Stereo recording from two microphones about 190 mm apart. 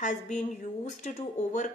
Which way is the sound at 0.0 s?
40° left (ahead or behind).